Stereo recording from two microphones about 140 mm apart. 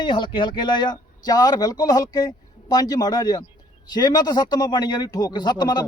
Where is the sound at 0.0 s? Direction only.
35° left (ahead or behind).